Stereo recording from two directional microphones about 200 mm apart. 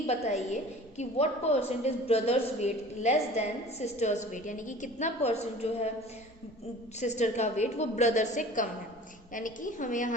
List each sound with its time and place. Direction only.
0.5 s a woman's voice: 35° left (ahead or behind)
7.0 s a woman's voice: 35° left (ahead or behind)